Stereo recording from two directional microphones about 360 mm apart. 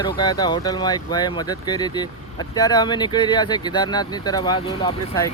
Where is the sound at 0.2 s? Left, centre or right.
Centre.